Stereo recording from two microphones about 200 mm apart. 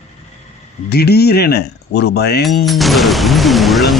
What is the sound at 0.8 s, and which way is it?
A man's voice, 50° left (ahead or behind).